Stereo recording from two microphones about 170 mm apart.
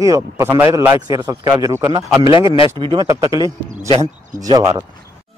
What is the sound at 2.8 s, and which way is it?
A man's voice, 30° right (ahead or behind).